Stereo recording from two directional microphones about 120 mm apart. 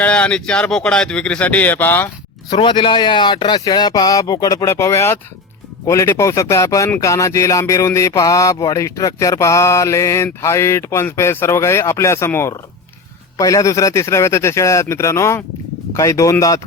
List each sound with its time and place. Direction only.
0.0 s speech: 10° left (ahead or behind)
2.5 s speech: 40° left (ahead or behind)